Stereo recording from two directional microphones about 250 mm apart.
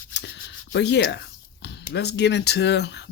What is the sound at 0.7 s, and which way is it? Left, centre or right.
Speech, left.